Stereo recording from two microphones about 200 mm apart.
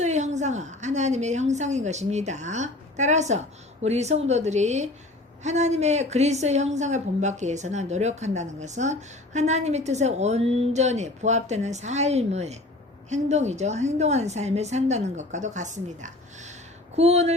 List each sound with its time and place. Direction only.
0.0 s a woman's voice: 35° right (ahead or behind)